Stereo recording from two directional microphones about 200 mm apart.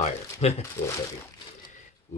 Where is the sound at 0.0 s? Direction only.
30° left (ahead or behind).